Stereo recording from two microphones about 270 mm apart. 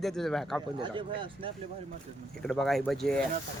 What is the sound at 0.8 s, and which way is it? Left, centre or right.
Speech, centre.